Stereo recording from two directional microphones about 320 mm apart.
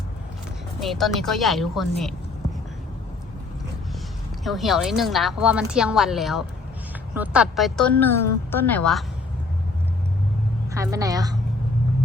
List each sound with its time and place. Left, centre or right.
0.8 s a woman's voice: centre
4.4 s a woman's voice: centre
10.7 s a woman's voice: centre